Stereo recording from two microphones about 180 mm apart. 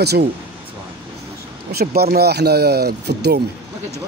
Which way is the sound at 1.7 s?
60° right (ahead or behind).